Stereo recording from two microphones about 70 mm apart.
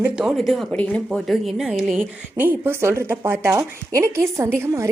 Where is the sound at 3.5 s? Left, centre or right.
Right.